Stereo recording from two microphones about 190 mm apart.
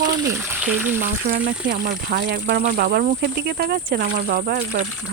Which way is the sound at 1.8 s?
50° right (ahead or behind).